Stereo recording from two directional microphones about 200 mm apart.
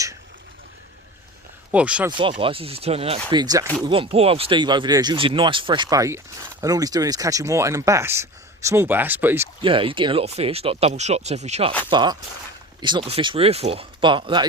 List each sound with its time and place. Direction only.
1.7 s speech: 5° right (ahead or behind)
2.0 s speech: 25° right (ahead or behind)
9.6 s speech: 25° right (ahead or behind)
11.9 s speech: 20° right (ahead or behind)